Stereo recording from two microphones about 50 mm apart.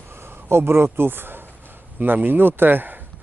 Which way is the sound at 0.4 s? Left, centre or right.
Right.